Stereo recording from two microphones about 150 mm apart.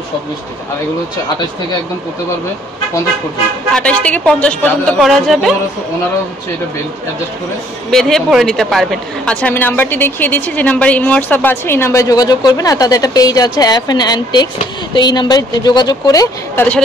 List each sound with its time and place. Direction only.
3.7 s a woman's voice: 10° left (ahead or behind)
4.9 s speech: centre (ahead or behind)
7.9 s a woman's voice: centre (ahead or behind); by 16.6 s 25° left (ahead or behind)